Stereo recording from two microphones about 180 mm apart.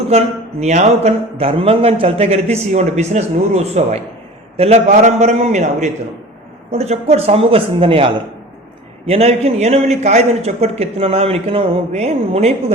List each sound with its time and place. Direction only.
0.1 s a man's voice: 35° right (ahead or behind)